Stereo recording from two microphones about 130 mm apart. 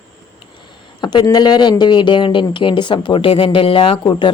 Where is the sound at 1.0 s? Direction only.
35° left (ahead or behind).